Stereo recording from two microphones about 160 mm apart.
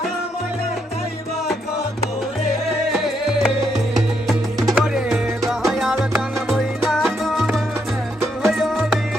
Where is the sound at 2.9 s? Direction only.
Centre (ahead or behind).